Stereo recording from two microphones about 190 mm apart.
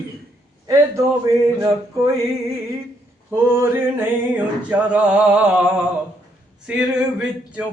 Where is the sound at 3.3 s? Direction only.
15° right (ahead or behind).